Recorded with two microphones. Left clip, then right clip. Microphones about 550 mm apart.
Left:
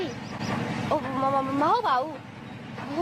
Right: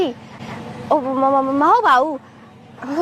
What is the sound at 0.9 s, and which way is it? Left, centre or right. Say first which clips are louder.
Speech: right 10 dB; right.